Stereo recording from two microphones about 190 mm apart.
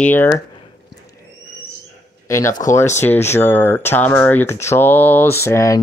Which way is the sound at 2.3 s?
15° left (ahead or behind).